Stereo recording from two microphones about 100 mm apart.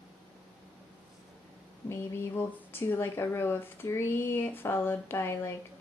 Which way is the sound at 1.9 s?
25° left (ahead or behind).